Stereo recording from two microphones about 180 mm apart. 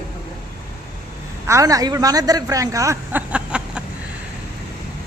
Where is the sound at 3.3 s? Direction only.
5° right (ahead or behind).